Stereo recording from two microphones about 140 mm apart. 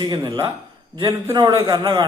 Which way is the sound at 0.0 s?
30° right (ahead or behind).